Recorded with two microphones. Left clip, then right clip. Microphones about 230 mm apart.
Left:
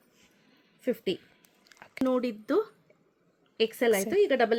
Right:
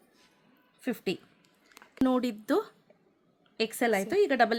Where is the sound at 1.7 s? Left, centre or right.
Centre.